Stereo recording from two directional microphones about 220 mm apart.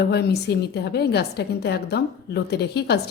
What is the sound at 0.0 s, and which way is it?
A woman's voice, 45° left (ahead or behind).